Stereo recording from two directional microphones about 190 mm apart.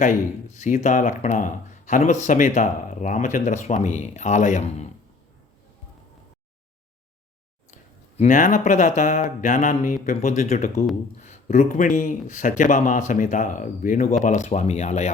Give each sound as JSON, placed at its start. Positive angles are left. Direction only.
{"t": 0.0, "sound": "speech", "side_deg": 40}
{"t": 8.2, "sound": "speech", "side_deg": 40}